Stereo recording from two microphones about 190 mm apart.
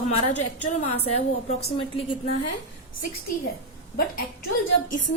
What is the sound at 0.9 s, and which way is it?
A woman's voice, 35° left (ahead or behind).